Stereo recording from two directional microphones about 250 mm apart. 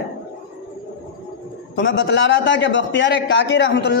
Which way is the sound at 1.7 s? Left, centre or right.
Left.